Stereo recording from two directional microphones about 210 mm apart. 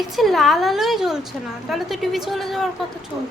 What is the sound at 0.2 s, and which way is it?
A woman's voice, centre (ahead or behind).